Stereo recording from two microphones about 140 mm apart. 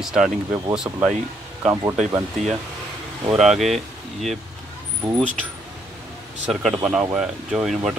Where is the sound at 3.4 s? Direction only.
Centre (ahead or behind).